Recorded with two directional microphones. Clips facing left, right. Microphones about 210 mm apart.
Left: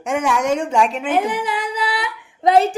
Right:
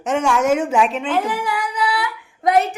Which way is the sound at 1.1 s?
20° left (ahead or behind).